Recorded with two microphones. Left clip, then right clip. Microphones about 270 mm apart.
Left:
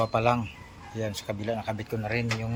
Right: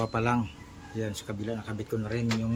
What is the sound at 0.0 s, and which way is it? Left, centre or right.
Speech, centre.